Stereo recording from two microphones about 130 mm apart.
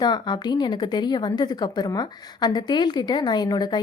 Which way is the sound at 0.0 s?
35° left (ahead or behind).